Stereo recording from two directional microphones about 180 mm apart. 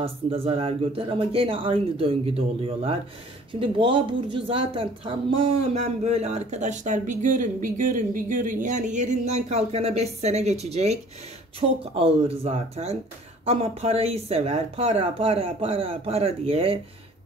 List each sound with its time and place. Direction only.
0.0 s speech: 30° right (ahead or behind)